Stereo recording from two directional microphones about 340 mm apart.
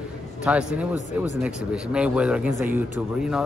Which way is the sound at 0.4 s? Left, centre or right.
Centre.